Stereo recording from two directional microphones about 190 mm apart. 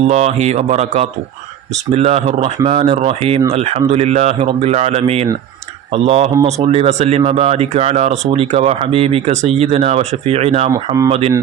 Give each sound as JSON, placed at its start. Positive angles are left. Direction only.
{"t": 0.1, "sound": "speech", "side_deg": -35}